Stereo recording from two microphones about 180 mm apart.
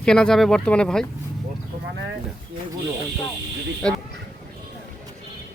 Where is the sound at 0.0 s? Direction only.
5° left (ahead or behind).